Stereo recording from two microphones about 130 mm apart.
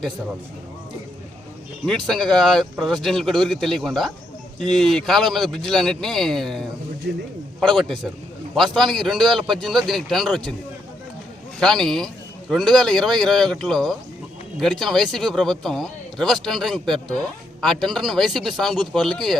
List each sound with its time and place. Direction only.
1.9 s speech: centre (ahead or behind)
11.6 s speech: 5° left (ahead or behind)